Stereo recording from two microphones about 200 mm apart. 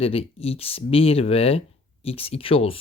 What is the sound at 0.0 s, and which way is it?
Speech, 30° left (ahead or behind).